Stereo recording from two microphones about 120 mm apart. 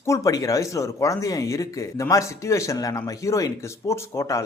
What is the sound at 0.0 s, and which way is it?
Speech, 25° left (ahead or behind).